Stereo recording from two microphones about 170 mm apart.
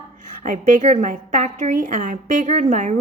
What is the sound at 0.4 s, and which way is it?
A woman's voice, 45° right (ahead or behind).